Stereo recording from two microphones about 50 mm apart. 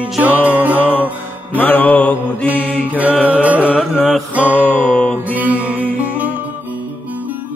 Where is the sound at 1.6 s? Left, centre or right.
Left.